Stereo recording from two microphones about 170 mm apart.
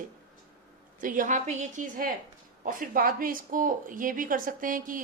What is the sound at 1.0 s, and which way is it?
Speech, 50° right (ahead or behind).